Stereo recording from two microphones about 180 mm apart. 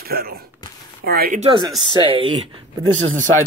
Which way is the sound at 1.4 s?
30° right (ahead or behind).